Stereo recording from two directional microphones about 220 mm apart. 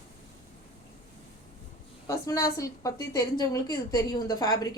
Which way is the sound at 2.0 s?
15° left (ahead or behind).